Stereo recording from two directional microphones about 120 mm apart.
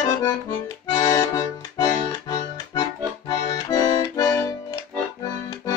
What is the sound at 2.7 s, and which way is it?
Accordion, 35° left (ahead or behind).